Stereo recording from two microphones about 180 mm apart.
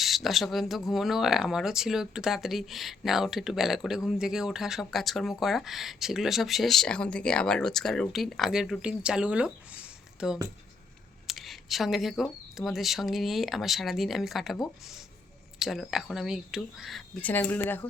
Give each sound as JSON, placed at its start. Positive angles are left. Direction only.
{"t": 0.0, "sound": "speech", "side_deg": 0}